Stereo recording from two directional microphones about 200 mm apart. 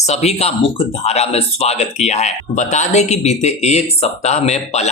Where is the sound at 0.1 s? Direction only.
30° left (ahead or behind).